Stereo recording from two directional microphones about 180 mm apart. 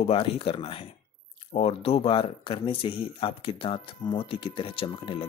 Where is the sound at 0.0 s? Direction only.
35° left (ahead or behind).